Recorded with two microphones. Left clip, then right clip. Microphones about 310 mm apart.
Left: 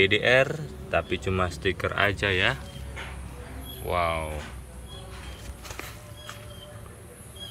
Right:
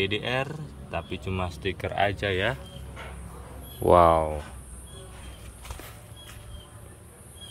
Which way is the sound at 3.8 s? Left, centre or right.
Right.